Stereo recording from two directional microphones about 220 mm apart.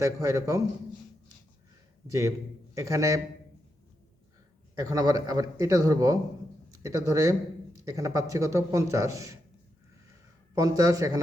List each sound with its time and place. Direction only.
0.0 s a man's voice: 15° right (ahead or behind)
2.0 s a man's voice: 15° right (ahead or behind)
4.8 s a man's voice: 15° right (ahead or behind)
10.5 s a man's voice: 15° right (ahead or behind)